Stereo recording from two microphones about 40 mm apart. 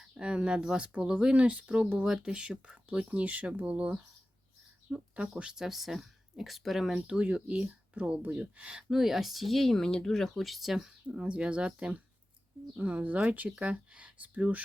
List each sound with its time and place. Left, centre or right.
0.0 s speech: right
2.0 s speech: centre; by 4.0 s right
4.9 s speech: right
5.4 s speech: centre
7.1 s speech: right
8.9 s speech: centre
11.0 s speech: right